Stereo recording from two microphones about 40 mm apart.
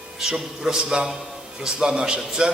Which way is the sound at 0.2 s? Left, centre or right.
Centre.